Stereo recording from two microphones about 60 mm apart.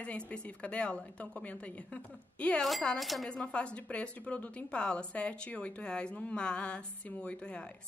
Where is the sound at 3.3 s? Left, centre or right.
Centre.